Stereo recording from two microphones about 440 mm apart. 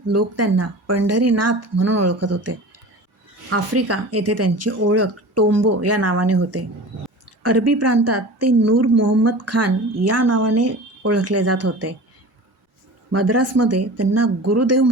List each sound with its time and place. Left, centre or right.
0.1 s a woman's voice: right
13.1 s a woman's voice: right